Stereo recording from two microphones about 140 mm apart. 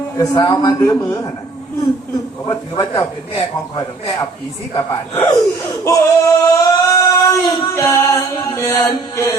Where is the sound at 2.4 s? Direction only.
25° left (ahead or behind).